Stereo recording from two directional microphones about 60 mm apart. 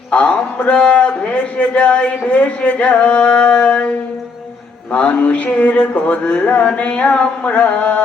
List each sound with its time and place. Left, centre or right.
0.1 s a man's voice: left
4.9 s a man's voice: left